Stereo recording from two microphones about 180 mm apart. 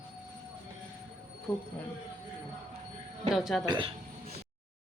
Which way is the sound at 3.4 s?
Centre (ahead or behind).